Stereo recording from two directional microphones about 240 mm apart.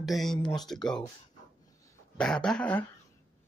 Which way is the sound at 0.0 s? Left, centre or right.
Centre.